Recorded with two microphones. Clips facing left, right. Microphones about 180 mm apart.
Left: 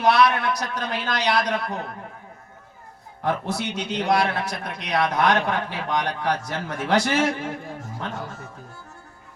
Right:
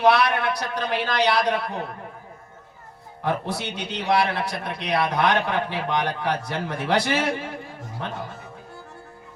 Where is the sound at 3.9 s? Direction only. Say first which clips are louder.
Even; 45° left (ahead or behind).